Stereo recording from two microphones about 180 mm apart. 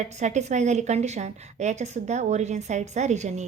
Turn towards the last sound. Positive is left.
turn(degrees=-40)  # may be behind; listen again after turning